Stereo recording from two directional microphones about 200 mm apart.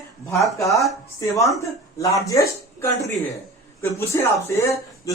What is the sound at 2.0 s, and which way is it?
Speech, 15° left (ahead or behind).